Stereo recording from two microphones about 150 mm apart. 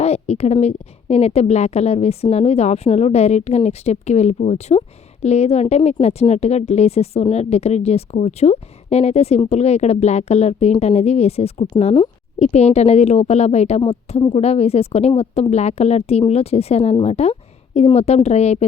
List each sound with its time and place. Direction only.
0.0 s a woman's voice: 45° left (ahead or behind)